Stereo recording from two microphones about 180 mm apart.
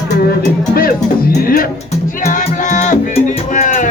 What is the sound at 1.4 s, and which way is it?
Music, 55° left (ahead or behind).